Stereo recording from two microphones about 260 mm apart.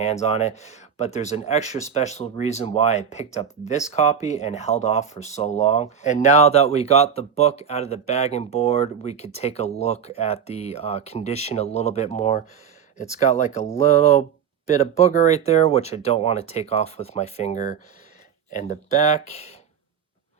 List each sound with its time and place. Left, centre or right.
0.0 s speech: left